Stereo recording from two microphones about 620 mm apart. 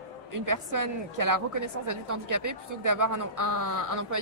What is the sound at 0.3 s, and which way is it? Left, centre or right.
A woman's voice, right.